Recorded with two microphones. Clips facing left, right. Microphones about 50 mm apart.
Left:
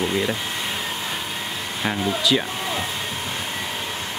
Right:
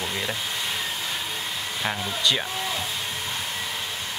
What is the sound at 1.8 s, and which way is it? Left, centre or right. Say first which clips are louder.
Speech: left 6 dB; centre.